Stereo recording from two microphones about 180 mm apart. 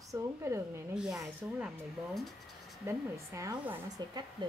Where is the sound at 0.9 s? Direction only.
5° right (ahead or behind).